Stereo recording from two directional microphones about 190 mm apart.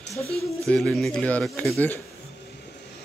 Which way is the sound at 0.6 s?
5° left (ahead or behind).